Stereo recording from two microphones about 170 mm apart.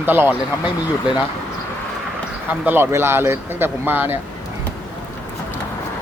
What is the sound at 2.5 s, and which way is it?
Speech, 10° right (ahead or behind).